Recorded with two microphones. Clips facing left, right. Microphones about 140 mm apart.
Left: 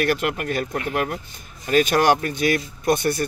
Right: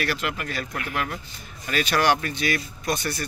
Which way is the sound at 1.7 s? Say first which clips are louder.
Left 5 dB; 45° left (ahead or behind).